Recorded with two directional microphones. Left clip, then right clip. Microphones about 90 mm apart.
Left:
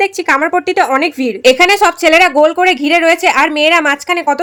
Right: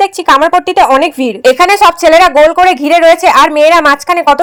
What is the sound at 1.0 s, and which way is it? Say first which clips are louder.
A woman's voice: right 2 dB; 45° right (ahead or behind).